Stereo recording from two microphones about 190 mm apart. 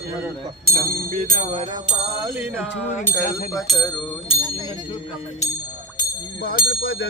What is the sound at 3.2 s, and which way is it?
Speech, 45° left (ahead or behind).